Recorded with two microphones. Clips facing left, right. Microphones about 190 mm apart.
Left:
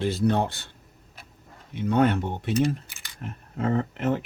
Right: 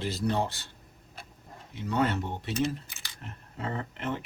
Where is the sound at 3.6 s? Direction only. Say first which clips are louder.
Left 9 dB; 50° left (ahead or behind).